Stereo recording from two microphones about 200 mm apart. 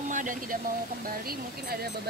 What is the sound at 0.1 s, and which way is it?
Speech, 40° right (ahead or behind).